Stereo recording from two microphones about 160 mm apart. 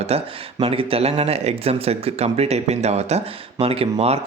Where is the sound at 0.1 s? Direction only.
40° right (ahead or behind).